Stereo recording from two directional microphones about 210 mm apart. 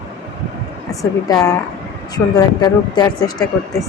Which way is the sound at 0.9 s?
15° left (ahead or behind).